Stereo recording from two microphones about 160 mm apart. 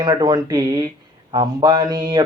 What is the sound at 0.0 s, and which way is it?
Speech, 25° right (ahead or behind).